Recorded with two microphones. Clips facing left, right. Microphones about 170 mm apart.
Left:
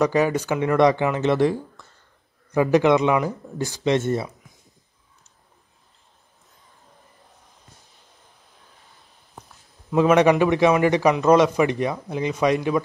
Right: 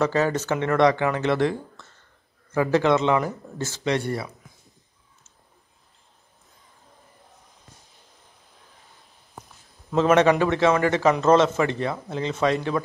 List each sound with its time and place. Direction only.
0.0 s speech: 15° left (ahead or behind)
9.8 s speech: 10° left (ahead or behind)